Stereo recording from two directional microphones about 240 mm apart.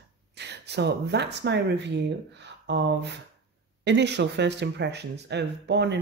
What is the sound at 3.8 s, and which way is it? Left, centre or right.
Speech, right.